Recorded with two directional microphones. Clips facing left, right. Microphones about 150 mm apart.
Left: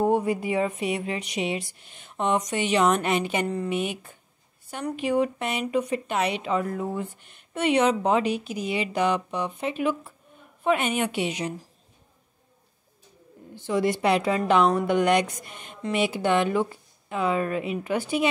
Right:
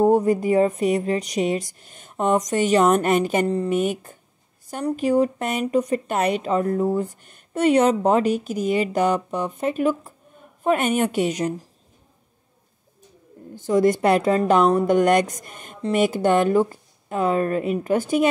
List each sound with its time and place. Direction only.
0.0 s speech: 40° right (ahead or behind)
13.6 s speech: 45° right (ahead or behind)